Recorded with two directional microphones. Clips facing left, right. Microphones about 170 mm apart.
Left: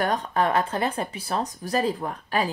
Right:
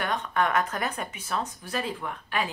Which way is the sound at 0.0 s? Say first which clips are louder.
Left 4 dB; 35° left (ahead or behind).